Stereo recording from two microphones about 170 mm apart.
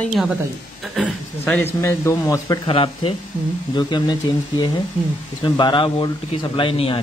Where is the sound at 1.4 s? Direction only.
15° left (ahead or behind).